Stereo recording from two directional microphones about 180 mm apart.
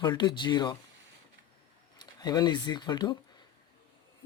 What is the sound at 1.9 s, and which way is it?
Speech, 20° left (ahead or behind).